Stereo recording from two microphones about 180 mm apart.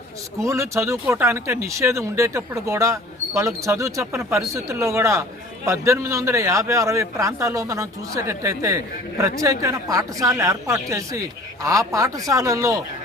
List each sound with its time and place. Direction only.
0.4 s a man's voice: 15° right (ahead or behind)